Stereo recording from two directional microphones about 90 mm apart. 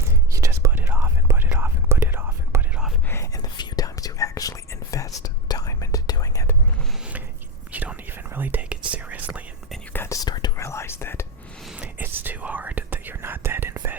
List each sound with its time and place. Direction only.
0.3 s whispering: 35° right (ahead or behind)
0.8 s whispering: 25° right (ahead or behind)
3.1 s whispering: 30° left (ahead or behind)
3.4 s whispering: 45° left (ahead or behind)
7.7 s whispering: 20° right (ahead or behind)
10.1 s whispering: 45° left (ahead or behind)
10.6 s whispering: 30° left (ahead or behind)
11.6 s a sound: 5° right (ahead or behind)
11.9 s whispering: 20° right (ahead or behind)